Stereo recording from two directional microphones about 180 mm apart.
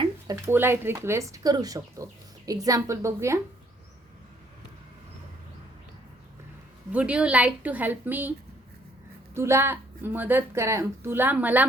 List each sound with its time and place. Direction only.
0.0 s a woman's voice: 20° right (ahead or behind)
6.9 s a woman's voice: 5° right (ahead or behind)
9.3 s a woman's voice: 15° right (ahead or behind)